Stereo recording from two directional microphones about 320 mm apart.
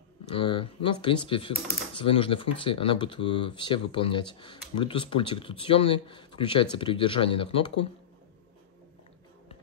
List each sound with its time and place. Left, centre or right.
0.4 s speech: centre